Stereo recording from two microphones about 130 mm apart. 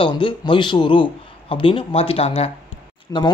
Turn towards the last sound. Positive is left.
turn(degrees=25)  # may be behind; listen again after turning